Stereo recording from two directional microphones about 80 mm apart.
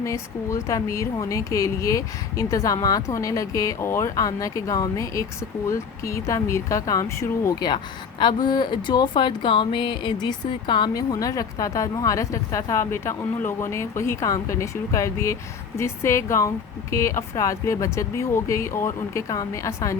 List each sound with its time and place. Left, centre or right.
0.0 s a woman's voice: left
8.2 s speech: left
10.9 s a woman's voice: left